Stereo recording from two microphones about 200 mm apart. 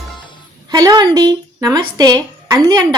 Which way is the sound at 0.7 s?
20° right (ahead or behind).